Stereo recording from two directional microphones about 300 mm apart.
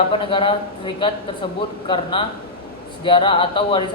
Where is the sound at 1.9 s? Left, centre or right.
Centre.